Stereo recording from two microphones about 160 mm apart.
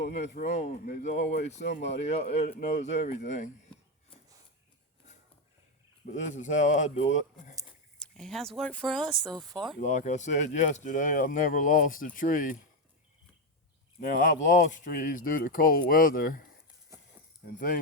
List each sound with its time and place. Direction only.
0.1 s speech: 45° left (ahead or behind)
6.1 s speech: 50° left (ahead or behind)
7.9 s speech: 5° left (ahead or behind)
9.2 s speech: 25° right (ahead or behind)
9.8 s speech: 50° left (ahead or behind)
14.0 s speech: 55° left (ahead or behind)